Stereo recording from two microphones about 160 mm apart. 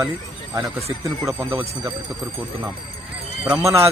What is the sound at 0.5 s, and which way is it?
A man's voice, 20° right (ahead or behind).